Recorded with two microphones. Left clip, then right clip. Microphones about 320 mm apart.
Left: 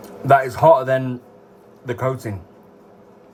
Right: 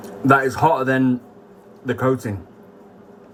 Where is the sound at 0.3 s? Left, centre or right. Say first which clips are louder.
Left 3 dB; centre.